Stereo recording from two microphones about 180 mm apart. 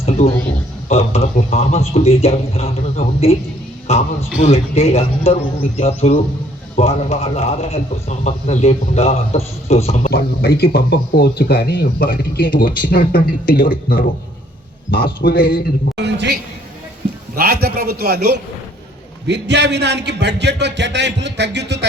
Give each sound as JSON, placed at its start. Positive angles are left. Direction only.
{"t": 0.0, "sound": "a sound", "side_deg": 35}
{"t": 0.9, "sound": "a man's voice", "side_deg": 35}
{"t": 10.1, "sound": "speech", "side_deg": 60}
{"t": 15.2, "sound": "speech", "side_deg": 55}
{"t": 16.0, "sound": "a man's voice", "side_deg": -75}
{"t": 17.3, "sound": "a man's voice", "side_deg": -55}
{"t": 19.3, "sound": "speech", "side_deg": -70}